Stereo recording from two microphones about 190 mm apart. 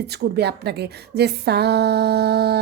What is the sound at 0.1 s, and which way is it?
Speech, 60° right (ahead or behind).